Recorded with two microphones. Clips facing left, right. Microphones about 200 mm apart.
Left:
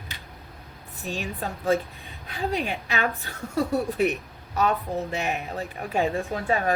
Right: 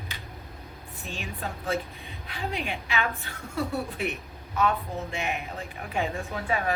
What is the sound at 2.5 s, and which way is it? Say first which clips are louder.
A woman's voice: left 1 dB; 40° left (ahead or behind).